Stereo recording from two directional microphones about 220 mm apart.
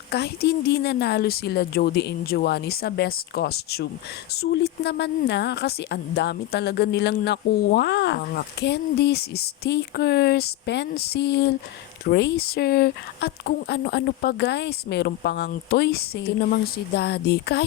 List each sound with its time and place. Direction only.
0.1 s speech: 50° left (ahead or behind)